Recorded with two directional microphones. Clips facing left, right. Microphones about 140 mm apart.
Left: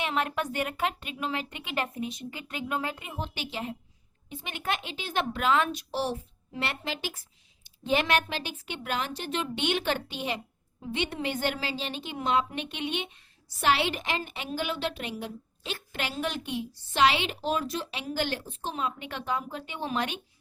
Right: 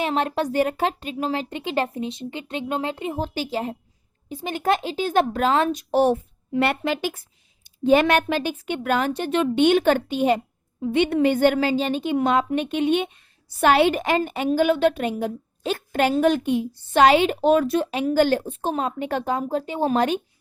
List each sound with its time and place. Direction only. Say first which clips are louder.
0.0 s a woman's voice: right 7 dB; 35° right (ahead or behind)
5.9 s a woman's voice: right 12 dB; 55° right (ahead or behind)
10.8 s a woman's voice: right 12 dB; 60° right (ahead or behind); by 20.2 s 40° right (ahead or behind)